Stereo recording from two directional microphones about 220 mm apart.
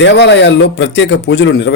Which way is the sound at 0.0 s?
50° left (ahead or behind).